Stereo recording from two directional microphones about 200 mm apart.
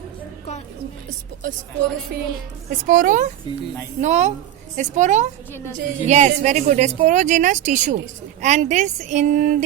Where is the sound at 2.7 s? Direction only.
40° right (ahead or behind).